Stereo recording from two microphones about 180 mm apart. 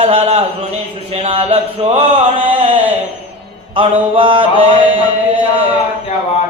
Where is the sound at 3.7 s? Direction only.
30° right (ahead or behind).